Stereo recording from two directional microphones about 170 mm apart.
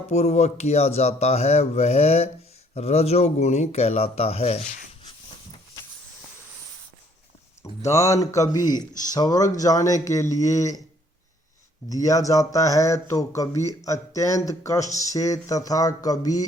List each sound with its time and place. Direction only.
0.1 s speech: 40° left (ahead or behind)
7.6 s speech: 15° left (ahead or behind)
11.9 s speech: 20° left (ahead or behind)